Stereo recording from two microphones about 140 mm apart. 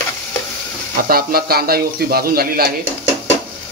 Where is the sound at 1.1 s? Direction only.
90° right.